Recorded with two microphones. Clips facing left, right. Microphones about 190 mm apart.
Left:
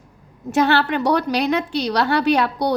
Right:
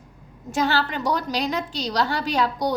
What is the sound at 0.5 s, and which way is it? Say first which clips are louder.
A woman's voice: left 6 dB; 65° left (ahead or behind).